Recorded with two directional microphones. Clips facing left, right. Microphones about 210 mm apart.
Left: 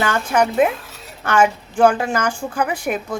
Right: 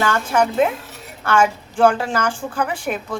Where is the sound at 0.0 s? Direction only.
15° left (ahead or behind).